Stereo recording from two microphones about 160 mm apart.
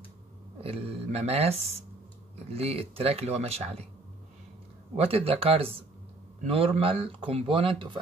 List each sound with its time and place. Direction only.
0.6 s speech: 40° right (ahead or behind)
4.9 s speech: 40° right (ahead or behind)